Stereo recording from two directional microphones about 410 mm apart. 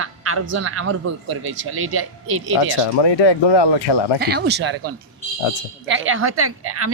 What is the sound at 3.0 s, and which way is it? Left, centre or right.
Speech, left.